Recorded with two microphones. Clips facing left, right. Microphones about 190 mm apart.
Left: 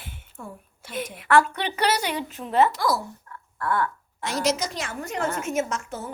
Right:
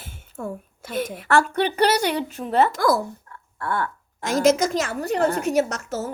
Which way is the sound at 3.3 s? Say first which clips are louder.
Left 3 dB; 30° right (ahead or behind).